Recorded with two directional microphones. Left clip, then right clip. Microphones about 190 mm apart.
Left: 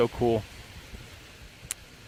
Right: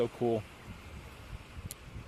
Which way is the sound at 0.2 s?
25° left (ahead or behind).